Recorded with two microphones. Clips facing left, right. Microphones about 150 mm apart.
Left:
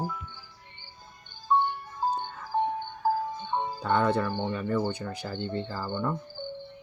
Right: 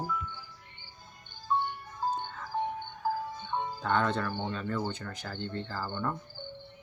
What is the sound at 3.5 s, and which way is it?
Music, 25° left (ahead or behind).